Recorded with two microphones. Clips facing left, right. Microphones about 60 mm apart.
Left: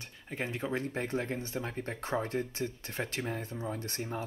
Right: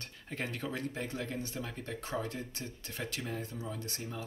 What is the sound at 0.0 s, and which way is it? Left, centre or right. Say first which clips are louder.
Speech: left 2 dB; centre.